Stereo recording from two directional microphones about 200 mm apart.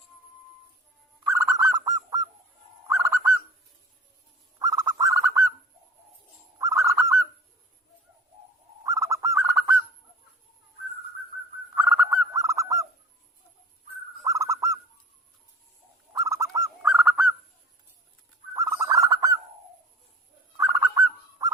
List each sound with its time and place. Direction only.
1.2 s bird: 15° right (ahead or behind)
4.6 s bird: 20° right (ahead or behind)
6.6 s bird: 15° right (ahead or behind)
8.8 s bird: 15° right (ahead or behind)
11.7 s bird: 10° right (ahead or behind)
14.3 s bird: 15° right (ahead or behind)
16.1 s bird: 15° right (ahead or behind)
18.5 s bird: 15° right (ahead or behind)
20.6 s bird: 15° right (ahead or behind)